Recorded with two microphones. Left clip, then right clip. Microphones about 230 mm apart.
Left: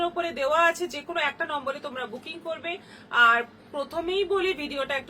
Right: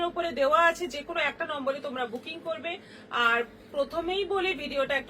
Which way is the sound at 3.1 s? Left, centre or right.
Centre.